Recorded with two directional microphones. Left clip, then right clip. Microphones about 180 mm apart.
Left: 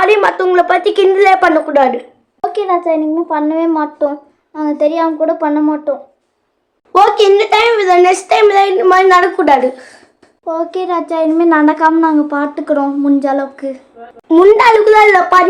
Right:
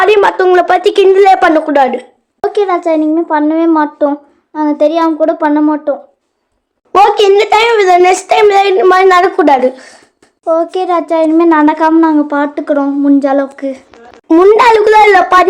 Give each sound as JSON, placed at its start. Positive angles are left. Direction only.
{"t": 0.0, "sound": "a woman's voice", "side_deg": -35}
{"t": 6.9, "sound": "a child's voice", "side_deg": -45}